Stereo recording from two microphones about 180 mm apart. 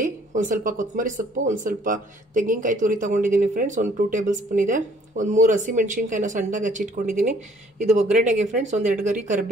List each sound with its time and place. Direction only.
0.0 s speech: 45° right (ahead or behind)